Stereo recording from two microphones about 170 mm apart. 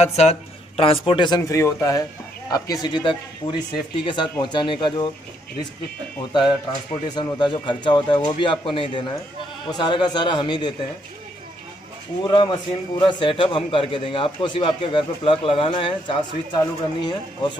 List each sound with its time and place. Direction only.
0.0 s speech: 40° left (ahead or behind)
7.1 s speech: 25° left (ahead or behind)
12.2 s a man's voice: 25° left (ahead or behind)